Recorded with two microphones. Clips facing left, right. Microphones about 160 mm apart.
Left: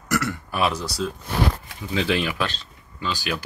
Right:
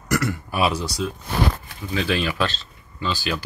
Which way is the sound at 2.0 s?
20° left (ahead or behind).